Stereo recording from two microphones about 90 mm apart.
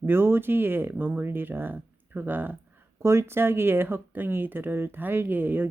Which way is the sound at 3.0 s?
30° right (ahead or behind).